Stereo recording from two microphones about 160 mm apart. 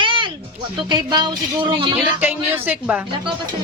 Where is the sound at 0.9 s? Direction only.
25° right (ahead or behind).